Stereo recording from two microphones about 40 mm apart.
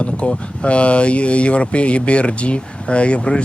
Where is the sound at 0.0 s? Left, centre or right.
Left.